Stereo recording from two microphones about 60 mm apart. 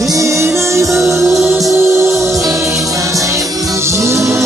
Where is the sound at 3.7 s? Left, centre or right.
Right.